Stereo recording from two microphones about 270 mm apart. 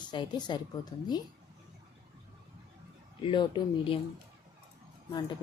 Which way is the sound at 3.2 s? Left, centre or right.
Centre.